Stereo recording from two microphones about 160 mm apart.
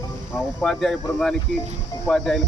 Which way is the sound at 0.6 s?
5° left (ahead or behind).